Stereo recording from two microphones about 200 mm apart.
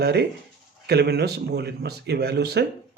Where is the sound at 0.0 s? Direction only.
55° right (ahead or behind).